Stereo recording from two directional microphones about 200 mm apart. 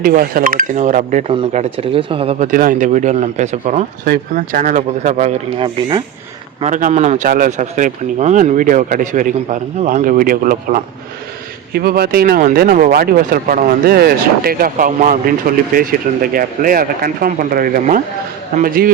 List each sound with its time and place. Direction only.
0.0 s speech: 45° right (ahead or behind)
1.3 s a man's voice: 25° right (ahead or behind)
2.5 s speech: 45° right (ahead or behind); by 6.0 s 25° right (ahead or behind)
6.6 s speech: 40° right (ahead or behind)